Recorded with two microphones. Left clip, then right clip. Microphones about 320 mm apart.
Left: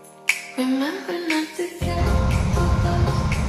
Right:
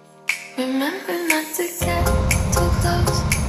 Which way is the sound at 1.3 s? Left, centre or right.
Right.